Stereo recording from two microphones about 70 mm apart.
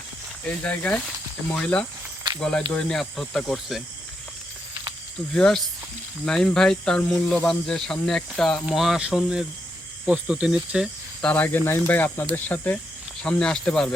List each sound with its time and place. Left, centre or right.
0.4 s speech: centre
5.3 s speech: centre
11.2 s speech: left
13.2 s speech: centre